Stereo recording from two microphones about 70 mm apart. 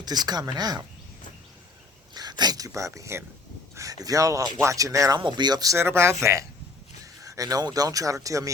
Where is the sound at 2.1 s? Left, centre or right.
Right.